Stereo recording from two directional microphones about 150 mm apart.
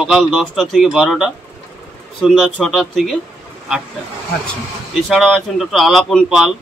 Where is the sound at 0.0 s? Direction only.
Centre (ahead or behind).